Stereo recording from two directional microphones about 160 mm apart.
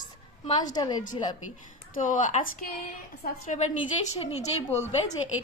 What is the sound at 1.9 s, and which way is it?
Speech, 55° left (ahead or behind).